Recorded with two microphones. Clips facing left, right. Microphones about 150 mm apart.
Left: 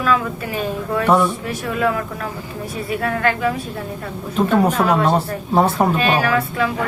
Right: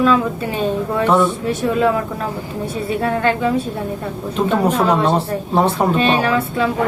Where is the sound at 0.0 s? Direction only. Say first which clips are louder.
Right 4 dB; 25° right (ahead or behind).